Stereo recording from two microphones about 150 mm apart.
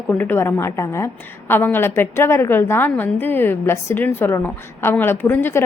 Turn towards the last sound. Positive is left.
turn(degrees=15)  # may be behind; listen again after turning